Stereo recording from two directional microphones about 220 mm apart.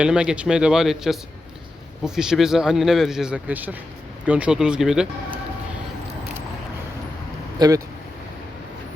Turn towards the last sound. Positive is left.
turn(degrees=-15)  # may be behind; listen again after turning